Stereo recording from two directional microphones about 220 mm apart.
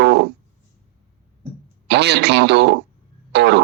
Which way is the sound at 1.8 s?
50° right (ahead or behind).